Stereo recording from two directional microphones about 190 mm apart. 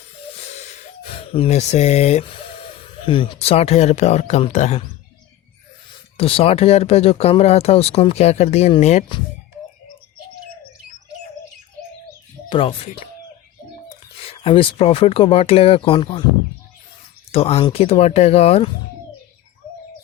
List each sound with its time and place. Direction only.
0.3 s speech: 35° left (ahead or behind)
6.1 s speech: 30° left (ahead or behind)
12.5 s speech: 30° left (ahead or behind)
14.2 s speech: 30° left (ahead or behind)
17.3 s speech: 30° left (ahead or behind)